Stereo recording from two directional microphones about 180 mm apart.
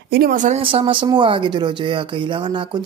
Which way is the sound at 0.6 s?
30° right (ahead or behind).